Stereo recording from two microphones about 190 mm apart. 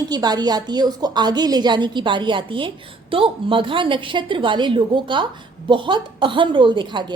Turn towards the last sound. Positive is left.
turn(degrees=-25)  # may be behind; listen again after turning